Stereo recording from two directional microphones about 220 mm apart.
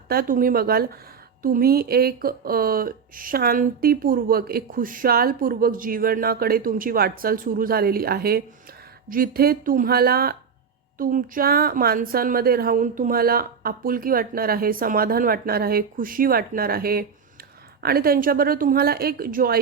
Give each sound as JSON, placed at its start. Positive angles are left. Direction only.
{"t": 0.1, "sound": "a woman's voice", "side_deg": -40}